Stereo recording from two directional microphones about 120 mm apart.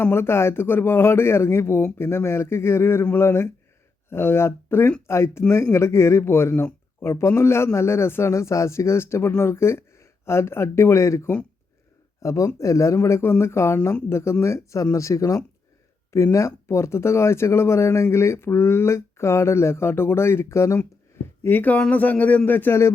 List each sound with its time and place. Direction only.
0.0 s a man's voice: 20° left (ahead or behind)